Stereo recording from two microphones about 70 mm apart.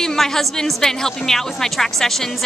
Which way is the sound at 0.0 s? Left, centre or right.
Centre.